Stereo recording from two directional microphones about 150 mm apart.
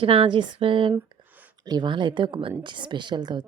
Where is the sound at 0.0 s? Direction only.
35° right (ahead or behind).